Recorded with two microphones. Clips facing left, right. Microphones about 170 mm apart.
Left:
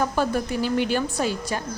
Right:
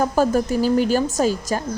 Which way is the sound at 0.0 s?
40° right (ahead or behind).